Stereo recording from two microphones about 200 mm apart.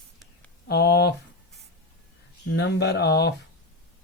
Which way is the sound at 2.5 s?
55° left (ahead or behind).